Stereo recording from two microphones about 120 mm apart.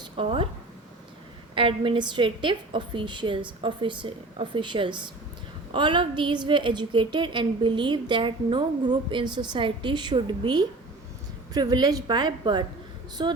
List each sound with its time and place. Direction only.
0.0 s speech: 50° right (ahead or behind)
1.5 s a woman's voice: 45° right (ahead or behind)